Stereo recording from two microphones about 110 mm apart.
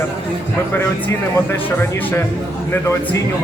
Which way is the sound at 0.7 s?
20° left (ahead or behind).